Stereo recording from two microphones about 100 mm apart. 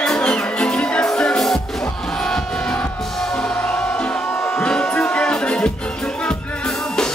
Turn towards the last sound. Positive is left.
turn(degrees=5)  # may be behind; listen again after turning